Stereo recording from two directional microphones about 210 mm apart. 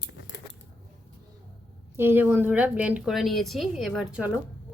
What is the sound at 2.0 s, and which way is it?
A woman's voice, 10° right (ahead or behind).